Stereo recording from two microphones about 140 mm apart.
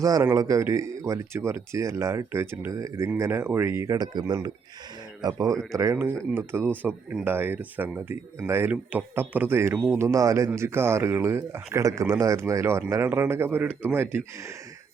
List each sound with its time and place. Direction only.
0.0 s speech: 25° right (ahead or behind)